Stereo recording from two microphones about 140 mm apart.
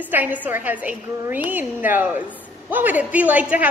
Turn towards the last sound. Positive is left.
turn(degrees=-10)  # may be behind; listen again after turning